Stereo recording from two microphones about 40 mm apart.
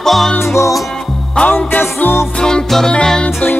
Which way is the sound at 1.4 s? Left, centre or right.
Left.